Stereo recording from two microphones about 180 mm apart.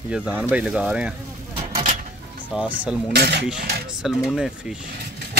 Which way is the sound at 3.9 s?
Centre (ahead or behind).